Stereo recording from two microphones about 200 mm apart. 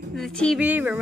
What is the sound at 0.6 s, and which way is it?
Speech, 10° right (ahead or behind).